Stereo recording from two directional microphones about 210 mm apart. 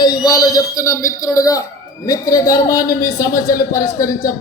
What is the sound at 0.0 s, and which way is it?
Speech, 20° left (ahead or behind).